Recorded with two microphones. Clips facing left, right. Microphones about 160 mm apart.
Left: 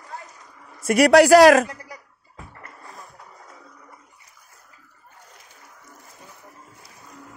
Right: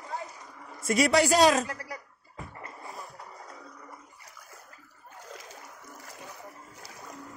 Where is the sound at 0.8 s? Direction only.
75° left (ahead or behind).